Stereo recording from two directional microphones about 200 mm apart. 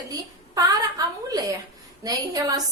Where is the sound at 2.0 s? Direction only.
20° right (ahead or behind).